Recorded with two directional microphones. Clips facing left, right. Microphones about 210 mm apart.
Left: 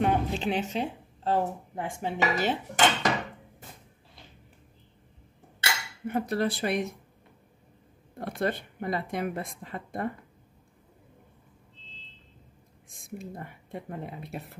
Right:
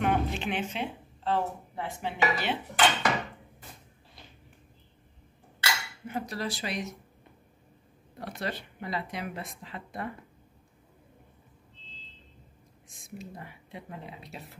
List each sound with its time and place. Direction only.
0.0 s speech: 35° left (ahead or behind)
6.0 s speech: 55° left (ahead or behind)
8.2 s speech: 50° left (ahead or behind)
12.8 s speech: 55° left (ahead or behind)